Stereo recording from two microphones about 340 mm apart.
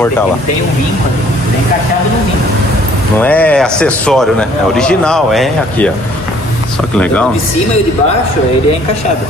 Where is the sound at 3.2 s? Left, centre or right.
Centre.